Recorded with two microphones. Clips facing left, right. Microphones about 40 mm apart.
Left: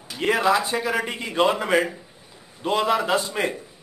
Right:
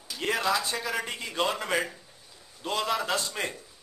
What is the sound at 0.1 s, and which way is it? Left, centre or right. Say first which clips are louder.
A man's voice: left 7 dB; left.